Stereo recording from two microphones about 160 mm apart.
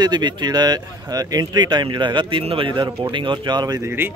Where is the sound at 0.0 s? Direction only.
25° right (ahead or behind).